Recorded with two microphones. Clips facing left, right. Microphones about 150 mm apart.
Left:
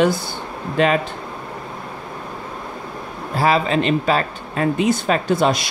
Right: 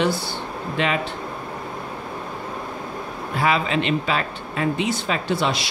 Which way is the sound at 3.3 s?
35° left (ahead or behind).